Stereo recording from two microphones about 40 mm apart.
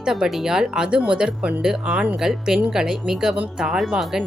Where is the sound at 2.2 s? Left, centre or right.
Centre.